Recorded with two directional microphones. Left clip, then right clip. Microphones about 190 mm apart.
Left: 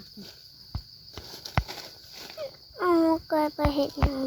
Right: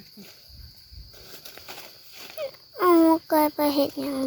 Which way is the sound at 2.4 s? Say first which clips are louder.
Right 5 dB; 35° right (ahead or behind).